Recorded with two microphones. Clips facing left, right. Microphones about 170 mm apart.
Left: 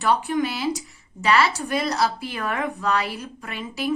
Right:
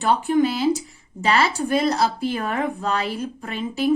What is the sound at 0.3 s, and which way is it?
A woman's voice, 30° right (ahead or behind).